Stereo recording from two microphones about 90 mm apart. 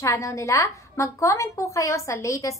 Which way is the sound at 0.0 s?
35° left (ahead or behind).